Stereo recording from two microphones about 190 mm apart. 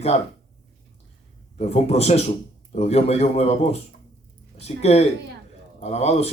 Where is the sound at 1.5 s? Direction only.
35° left (ahead or behind).